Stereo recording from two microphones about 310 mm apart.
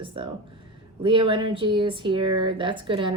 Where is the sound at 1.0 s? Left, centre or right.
Centre.